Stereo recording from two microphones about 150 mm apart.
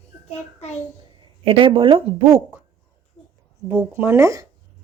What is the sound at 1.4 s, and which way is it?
A woman's voice, 35° right (ahead or behind).